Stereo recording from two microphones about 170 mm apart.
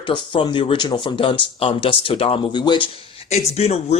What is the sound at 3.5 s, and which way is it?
Speech, 40° left (ahead or behind).